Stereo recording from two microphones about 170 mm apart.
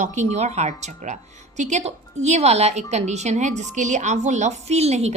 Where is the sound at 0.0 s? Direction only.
45° right (ahead or behind).